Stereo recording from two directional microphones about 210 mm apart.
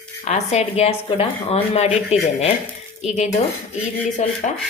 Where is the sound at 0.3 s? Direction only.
30° left (ahead or behind).